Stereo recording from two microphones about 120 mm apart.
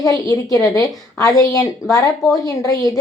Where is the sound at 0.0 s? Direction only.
30° left (ahead or behind).